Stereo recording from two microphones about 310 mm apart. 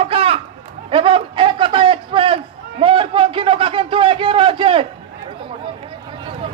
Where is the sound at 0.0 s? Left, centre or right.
Centre.